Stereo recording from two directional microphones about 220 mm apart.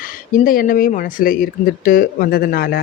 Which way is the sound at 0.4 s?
40° left (ahead or behind).